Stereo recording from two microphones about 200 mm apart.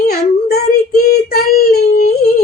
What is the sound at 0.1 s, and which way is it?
Child singing, 50° left (ahead or behind).